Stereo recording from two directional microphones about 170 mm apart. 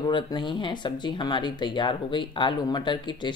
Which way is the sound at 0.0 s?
25° left (ahead or behind).